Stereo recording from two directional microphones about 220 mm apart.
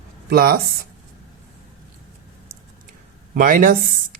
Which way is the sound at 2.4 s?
40° right (ahead or behind).